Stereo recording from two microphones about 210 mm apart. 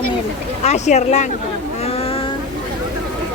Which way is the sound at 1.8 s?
30° left (ahead or behind).